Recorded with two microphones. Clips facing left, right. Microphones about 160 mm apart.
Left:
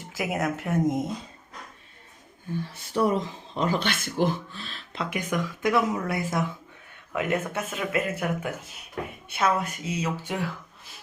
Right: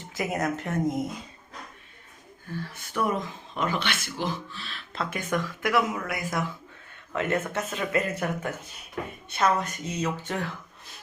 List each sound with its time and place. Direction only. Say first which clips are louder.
0.1 s speech: even; 5° left (ahead or behind)
2.7 s speech: left 4 dB; 30° left (ahead or behind)
3.8 s speech: left 5 dB; 50° left (ahead or behind)
4.9 s speech: even; 15° left (ahead or behind)
5.9 s speech: left 3 dB; 30° left (ahead or behind)
7.1 s speech: even; 10° left (ahead or behind)